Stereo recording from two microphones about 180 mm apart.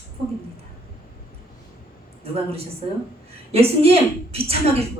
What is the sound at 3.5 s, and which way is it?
A woman's voice, 35° right (ahead or behind).